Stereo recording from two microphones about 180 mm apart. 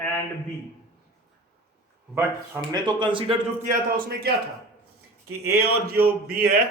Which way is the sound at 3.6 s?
55° right (ahead or behind).